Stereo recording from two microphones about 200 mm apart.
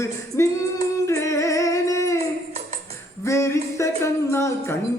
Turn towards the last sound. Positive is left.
turn(degrees=15)  # may be behind; listen again after turning